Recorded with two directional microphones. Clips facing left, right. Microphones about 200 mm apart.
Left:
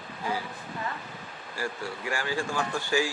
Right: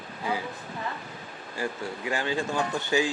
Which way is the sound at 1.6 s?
20° right (ahead or behind).